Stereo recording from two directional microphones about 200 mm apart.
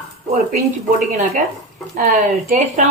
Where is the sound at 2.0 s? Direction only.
40° right (ahead or behind).